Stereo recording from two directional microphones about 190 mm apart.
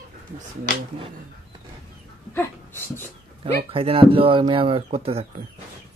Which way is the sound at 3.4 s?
30° right (ahead or behind).